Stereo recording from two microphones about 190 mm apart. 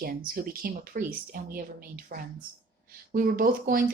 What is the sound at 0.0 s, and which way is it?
Speech, 50° right (ahead or behind).